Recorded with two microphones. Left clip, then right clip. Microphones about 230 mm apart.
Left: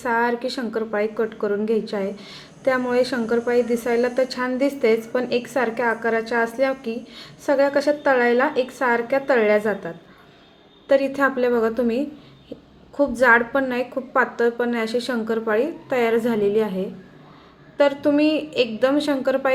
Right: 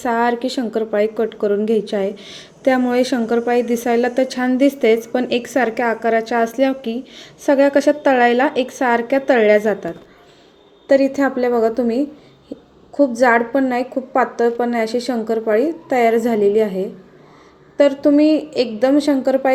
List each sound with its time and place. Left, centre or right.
0.0 s a woman's voice: centre